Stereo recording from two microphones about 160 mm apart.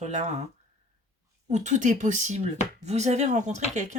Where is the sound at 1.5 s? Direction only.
45° right (ahead or behind).